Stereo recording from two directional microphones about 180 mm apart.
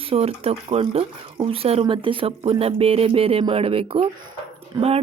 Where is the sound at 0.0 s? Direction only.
30° right (ahead or behind).